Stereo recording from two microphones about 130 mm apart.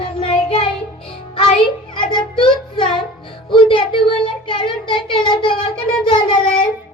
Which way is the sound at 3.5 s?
40° left (ahead or behind).